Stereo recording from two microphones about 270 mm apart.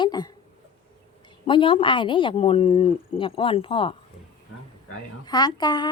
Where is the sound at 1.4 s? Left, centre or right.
Centre.